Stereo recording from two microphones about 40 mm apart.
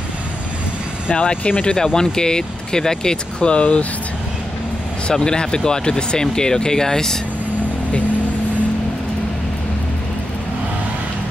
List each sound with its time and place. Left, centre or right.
1.1 s speech: left
1.7 s speech: centre
5.1 s speech: centre